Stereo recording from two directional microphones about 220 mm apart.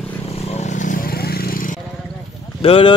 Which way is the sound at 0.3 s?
30° left (ahead or behind).